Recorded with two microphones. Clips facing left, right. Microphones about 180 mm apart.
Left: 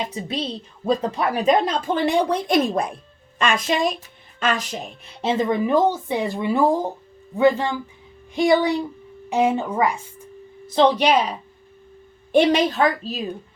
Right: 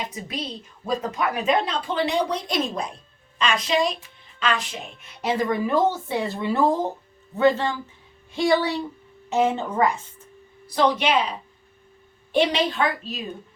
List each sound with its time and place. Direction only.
0.0 s a woman's voice: 30° left (ahead or behind); by 10.2 s 10° left (ahead or behind)
10.7 s a woman's voice: 30° left (ahead or behind); by 13.1 s 45° left (ahead or behind)